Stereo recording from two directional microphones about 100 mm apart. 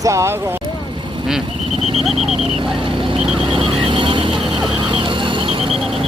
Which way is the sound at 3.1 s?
60° right (ahead or behind).